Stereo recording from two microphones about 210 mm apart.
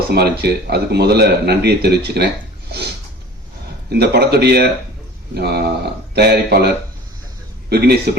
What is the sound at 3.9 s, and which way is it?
A man's voice, 50° right (ahead or behind).